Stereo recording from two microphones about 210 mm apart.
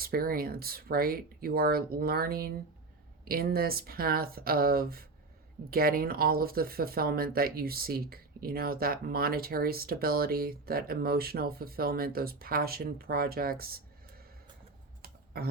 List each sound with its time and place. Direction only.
0.0 s speech: 45° right (ahead or behind)
15.0 s tick: 45° right (ahead or behind)